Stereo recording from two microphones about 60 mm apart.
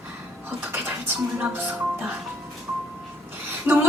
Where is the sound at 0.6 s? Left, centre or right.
Right.